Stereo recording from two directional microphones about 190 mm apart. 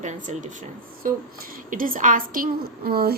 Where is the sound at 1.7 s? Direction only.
45° right (ahead or behind).